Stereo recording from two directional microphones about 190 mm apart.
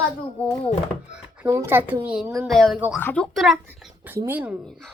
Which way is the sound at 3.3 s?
Centre (ahead or behind).